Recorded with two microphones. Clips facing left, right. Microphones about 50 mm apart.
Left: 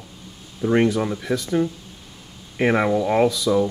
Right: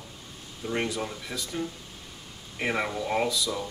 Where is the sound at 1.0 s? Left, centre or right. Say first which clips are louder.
Left 9 dB; left.